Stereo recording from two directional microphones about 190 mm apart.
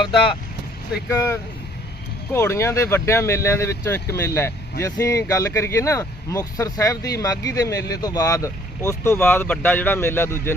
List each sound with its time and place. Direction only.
1.1 s speech: 15° left (ahead or behind)